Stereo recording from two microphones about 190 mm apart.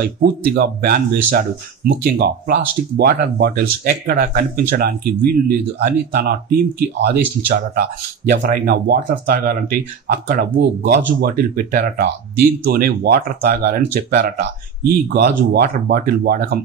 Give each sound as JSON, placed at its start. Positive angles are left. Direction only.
{"t": 0.2, "sound": "speech", "side_deg": -55}
{"t": 8.3, "sound": "speech", "side_deg": -55}